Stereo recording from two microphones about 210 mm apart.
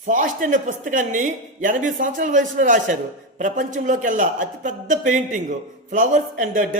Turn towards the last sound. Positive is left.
turn(degrees=-40)  # may be behind; listen again after turning